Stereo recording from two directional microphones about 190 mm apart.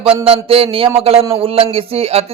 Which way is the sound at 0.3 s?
30° right (ahead or behind).